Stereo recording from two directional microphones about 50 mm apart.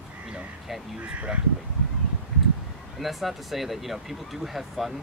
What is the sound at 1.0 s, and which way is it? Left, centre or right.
Speech, right.